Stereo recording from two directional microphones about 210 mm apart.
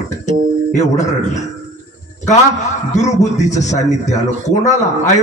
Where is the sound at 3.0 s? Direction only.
35° left (ahead or behind).